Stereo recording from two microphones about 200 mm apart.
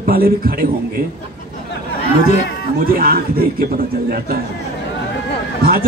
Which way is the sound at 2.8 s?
45° right (ahead or behind).